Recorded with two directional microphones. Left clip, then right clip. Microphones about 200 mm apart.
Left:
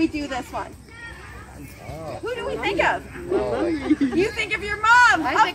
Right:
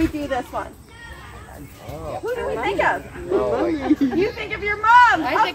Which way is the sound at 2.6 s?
5° left (ahead or behind).